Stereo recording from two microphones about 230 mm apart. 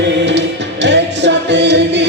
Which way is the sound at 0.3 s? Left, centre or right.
Right.